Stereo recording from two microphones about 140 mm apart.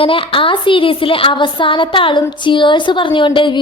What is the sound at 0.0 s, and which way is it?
Speech, 40° left (ahead or behind).